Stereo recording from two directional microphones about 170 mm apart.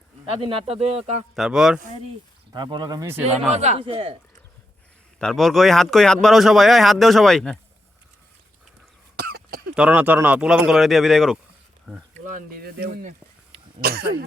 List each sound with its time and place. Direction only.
0.3 s speech: 30° right (ahead or behind)
1.4 s speech: 5° right (ahead or behind)
2.5 s speech: 25° right (ahead or behind)
3.5 s speech: 40° right (ahead or behind)
5.2 s speech: centre (ahead or behind)
9.1 s cough: 65° right (ahead or behind)
9.7 s speech: 5° right (ahead or behind)
12.3 s speech: 50° right (ahead or behind)
13.8 s cough: 65° right (ahead or behind)